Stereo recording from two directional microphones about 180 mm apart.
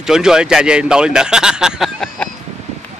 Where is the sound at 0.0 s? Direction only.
5° right (ahead or behind).